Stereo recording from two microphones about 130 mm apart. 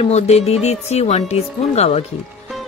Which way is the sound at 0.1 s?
55° left (ahead or behind).